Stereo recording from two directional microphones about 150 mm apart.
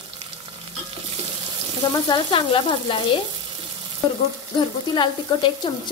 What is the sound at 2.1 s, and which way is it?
Frying, 30° left (ahead or behind).